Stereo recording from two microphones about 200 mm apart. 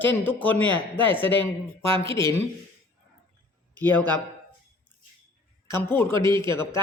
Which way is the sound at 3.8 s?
10° left (ahead or behind).